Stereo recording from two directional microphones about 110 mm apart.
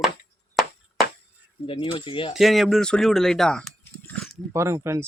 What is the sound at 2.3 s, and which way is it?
Speech, centre (ahead or behind).